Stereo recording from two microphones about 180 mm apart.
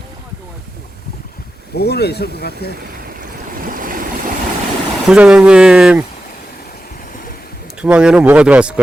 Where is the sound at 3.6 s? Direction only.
50° right (ahead or behind).